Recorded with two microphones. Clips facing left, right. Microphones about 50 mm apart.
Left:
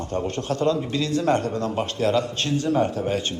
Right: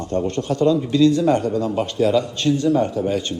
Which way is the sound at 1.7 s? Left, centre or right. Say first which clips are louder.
Right 3 dB; centre.